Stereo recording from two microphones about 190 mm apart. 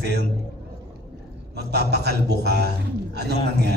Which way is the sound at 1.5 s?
60° right (ahead or behind).